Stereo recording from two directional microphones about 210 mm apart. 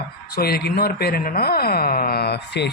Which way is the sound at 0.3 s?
50° left (ahead or behind).